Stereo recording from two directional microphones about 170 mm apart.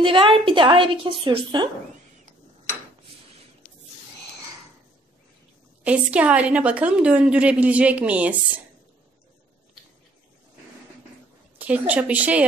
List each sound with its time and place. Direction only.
0.0 s a woman's voice: 30° right (ahead or behind)
5.9 s a woman's voice: 5° right (ahead or behind)
11.5 s a woman's voice: 10° right (ahead or behind)